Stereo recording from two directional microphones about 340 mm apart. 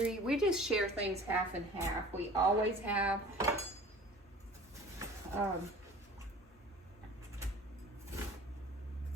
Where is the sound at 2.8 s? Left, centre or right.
Centre.